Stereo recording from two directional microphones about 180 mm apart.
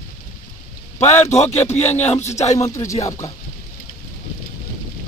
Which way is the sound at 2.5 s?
15° left (ahead or behind).